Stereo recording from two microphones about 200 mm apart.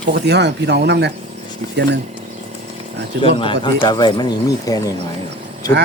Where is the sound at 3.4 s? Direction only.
25° left (ahead or behind).